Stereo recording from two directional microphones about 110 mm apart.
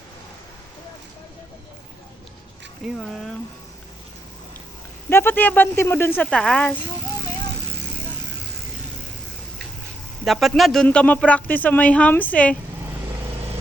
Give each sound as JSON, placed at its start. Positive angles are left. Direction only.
{"t": 3.0, "sound": "speech", "side_deg": 5}
{"t": 5.0, "sound": "speech", "side_deg": 20}
{"t": 10.2, "sound": "speech", "side_deg": 0}